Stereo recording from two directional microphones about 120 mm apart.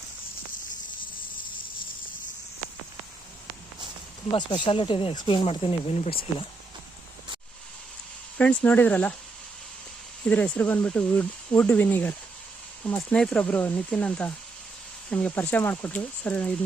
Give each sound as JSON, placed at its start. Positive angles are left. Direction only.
{"t": 4.3, "sound": "speech", "side_deg": 40}
{"t": 8.4, "sound": "speech", "side_deg": 10}
{"t": 10.2, "sound": "speech", "side_deg": 10}